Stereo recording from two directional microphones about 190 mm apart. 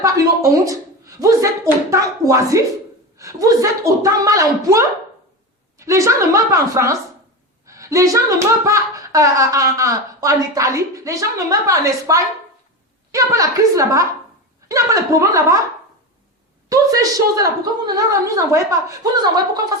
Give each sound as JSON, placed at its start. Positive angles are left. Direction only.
{"t": 0.0, "sound": "speech", "side_deg": -15}
{"t": 7.7, "sound": "a sound", "side_deg": -15}
{"t": 8.6, "sound": "speech", "side_deg": -15}
{"t": 16.6, "sound": "speech", "side_deg": -20}